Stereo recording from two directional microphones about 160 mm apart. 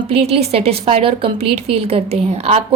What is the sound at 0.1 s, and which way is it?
A woman's voice, 40° right (ahead or behind).